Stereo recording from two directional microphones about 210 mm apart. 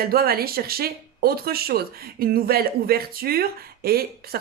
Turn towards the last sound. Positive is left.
turn(degrees=-45)  # may be behind; listen again after turning